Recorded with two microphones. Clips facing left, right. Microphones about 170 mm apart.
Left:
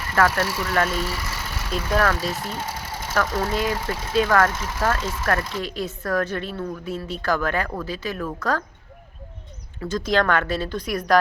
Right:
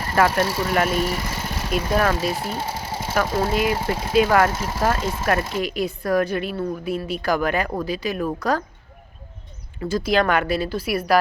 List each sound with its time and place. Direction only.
0.2 s speech: 25° right (ahead or behind)
1.9 s speech: 15° right (ahead or behind)
2.3 s sewing machine: 30° right (ahead or behind)
3.2 s speech: 30° right (ahead or behind)
3.5 s speech: 15° right (ahead or behind)
3.8 s speech: 30° right (ahead or behind)
4.1 s speech: 15° right (ahead or behind)
4.4 s speech: 30° right (ahead or behind)
5.3 s speech: 15° right (ahead or behind)
9.8 s speech: 10° right (ahead or behind)